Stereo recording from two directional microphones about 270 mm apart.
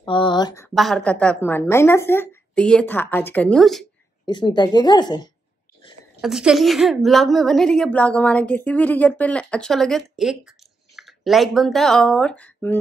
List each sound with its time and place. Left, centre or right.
0.0 s speech: centre
0.7 s a woman's voice: centre
4.3 s speech: centre
6.2 s a woman's voice: centre